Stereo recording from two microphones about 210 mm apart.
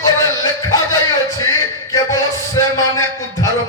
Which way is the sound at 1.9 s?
15° left (ahead or behind).